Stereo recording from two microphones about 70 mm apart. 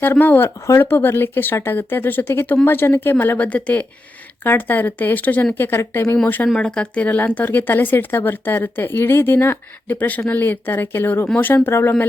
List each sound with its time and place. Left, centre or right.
0.0 s speech: left
5.9 s speech: left
6.2 s speech: left
6.6 s speech: centre; by 12.0 s left